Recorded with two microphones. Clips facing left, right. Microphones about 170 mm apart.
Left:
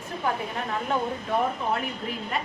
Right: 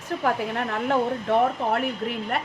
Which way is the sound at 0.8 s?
65° right (ahead or behind).